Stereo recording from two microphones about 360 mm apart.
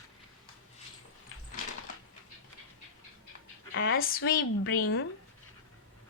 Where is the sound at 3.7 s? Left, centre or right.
Left.